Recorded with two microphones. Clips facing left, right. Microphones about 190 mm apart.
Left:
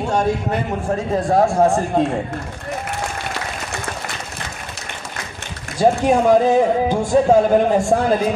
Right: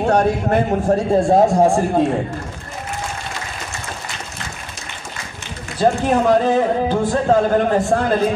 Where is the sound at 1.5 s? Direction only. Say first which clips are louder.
Right 1 dB; 15° right (ahead or behind).